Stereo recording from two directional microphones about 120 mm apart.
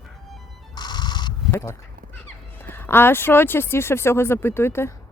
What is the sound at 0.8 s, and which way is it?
Music, 35° left (ahead or behind).